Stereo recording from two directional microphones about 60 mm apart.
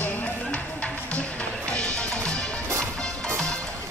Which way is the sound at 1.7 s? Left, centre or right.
Centre.